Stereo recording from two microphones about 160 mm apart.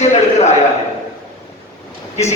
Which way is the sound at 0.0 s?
45° left (ahead or behind).